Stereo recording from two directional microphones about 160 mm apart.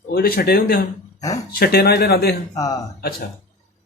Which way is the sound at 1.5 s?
80° left.